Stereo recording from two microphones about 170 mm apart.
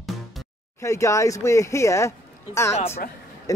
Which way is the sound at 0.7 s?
15° left (ahead or behind).